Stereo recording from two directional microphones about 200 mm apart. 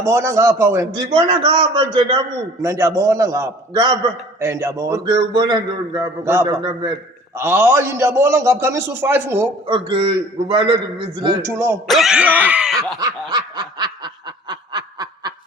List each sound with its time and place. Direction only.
0.0 s a man's voice: 15° right (ahead or behind)
9.6 s a man's voice: 25° right (ahead or behind)
11.9 s a sound: centre (ahead or behind)
13.0 s snicker: 20° right (ahead or behind)